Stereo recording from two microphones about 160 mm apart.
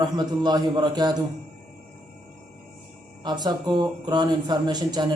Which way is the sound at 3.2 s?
25° right (ahead or behind).